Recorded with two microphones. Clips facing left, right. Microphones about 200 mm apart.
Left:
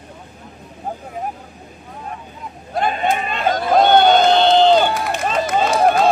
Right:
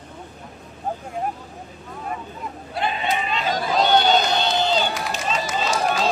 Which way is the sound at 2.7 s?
45° left (ahead or behind).